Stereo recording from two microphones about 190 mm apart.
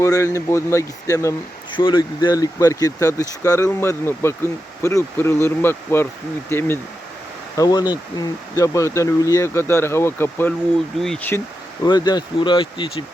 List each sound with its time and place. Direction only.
0.0 s speech: 15° left (ahead or behind)